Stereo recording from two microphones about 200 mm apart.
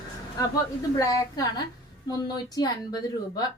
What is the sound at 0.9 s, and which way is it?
A woman's voice, 20° left (ahead or behind).